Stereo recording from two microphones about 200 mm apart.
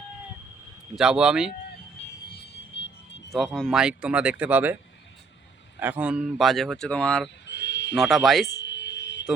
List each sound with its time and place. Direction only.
0.9 s speech: 5° right (ahead or behind)
3.3 s speech: centre (ahead or behind)
5.8 s speech: 10° right (ahead or behind)
7.4 s a sound: 60° left (ahead or behind)
7.9 s speech: centre (ahead or behind)
8.5 s a sound: 65° left (ahead or behind)